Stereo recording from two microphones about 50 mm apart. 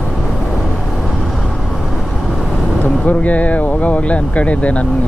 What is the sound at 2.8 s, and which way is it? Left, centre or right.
Speech, left.